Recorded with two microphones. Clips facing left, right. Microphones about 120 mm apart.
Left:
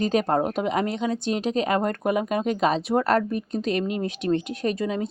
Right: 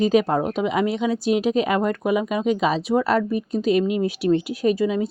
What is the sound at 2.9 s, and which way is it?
Speech, 50° left (ahead or behind).